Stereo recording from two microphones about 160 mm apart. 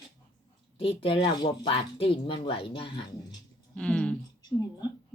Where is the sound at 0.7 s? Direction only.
35° left (ahead or behind).